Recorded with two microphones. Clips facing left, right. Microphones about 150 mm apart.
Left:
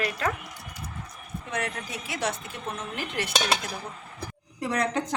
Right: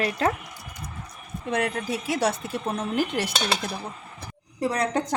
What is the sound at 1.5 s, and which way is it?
A woman's voice, 30° right (ahead or behind).